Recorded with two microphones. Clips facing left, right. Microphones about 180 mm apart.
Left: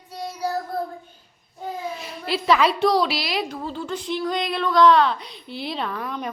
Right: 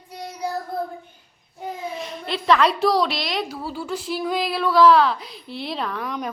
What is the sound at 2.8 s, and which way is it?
Speech, centre (ahead or behind).